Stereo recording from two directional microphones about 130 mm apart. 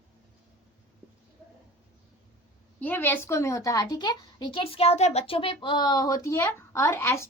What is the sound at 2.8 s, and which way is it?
A woman's voice, 15° left (ahead or behind).